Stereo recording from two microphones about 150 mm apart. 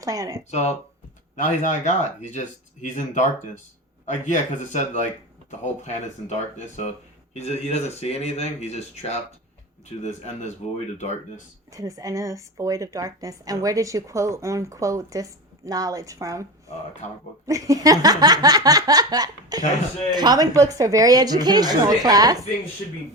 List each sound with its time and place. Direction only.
0.0 s a woman's voice: 20° right (ahead or behind)
1.4 s speech: 55° left (ahead or behind)
7.3 s speech: 45° left (ahead or behind)
11.7 s a woman's voice: 20° right (ahead or behind)
17.0 s speech: 50° left (ahead or behind)
17.4 s a woman's voice: 20° right (ahead or behind)